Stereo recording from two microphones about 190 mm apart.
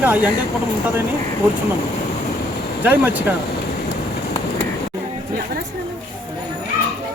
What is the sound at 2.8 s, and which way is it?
Speech, 10° right (ahead or behind).